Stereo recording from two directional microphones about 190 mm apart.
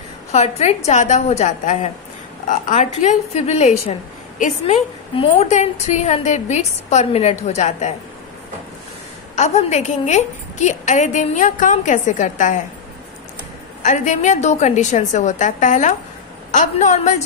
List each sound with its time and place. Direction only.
0.3 s a woman's voice: 35° left (ahead or behind)
9.3 s a woman's voice: 35° left (ahead or behind)
13.8 s a woman's voice: 40° left (ahead or behind)